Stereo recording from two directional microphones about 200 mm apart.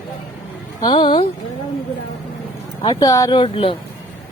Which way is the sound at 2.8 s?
20° left (ahead or behind).